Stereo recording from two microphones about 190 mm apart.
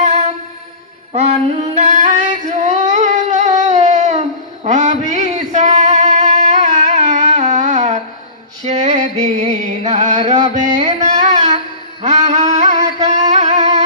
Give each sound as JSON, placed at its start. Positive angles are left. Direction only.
{"t": 0.0, "sound": "music", "side_deg": -35}
{"t": 1.1, "sound": "female singing", "side_deg": -35}
{"t": 3.7, "sound": "a sound", "side_deg": -40}
{"t": 4.6, "sound": "music", "side_deg": -40}
{"t": 11.3, "sound": "a sound", "side_deg": -40}
{"t": 12.0, "sound": "music", "side_deg": -40}